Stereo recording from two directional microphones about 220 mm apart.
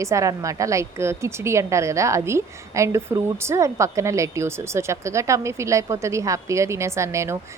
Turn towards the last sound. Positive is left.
turn(degrees=-15)  # may be behind; listen again after turning